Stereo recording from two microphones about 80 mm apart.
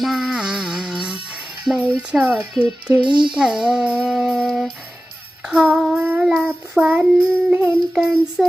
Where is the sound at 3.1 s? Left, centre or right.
Right.